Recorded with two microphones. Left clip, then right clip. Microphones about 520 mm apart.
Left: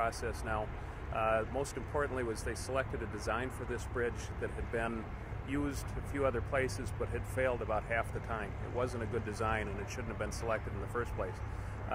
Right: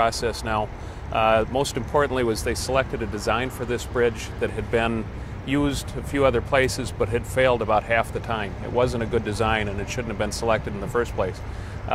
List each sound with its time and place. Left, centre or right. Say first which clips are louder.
0.0 s speech: right 13 dB; right